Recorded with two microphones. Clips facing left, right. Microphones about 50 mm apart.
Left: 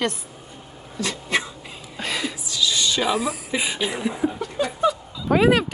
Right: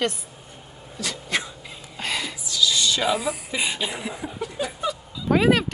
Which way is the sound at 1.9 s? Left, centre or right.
Centre.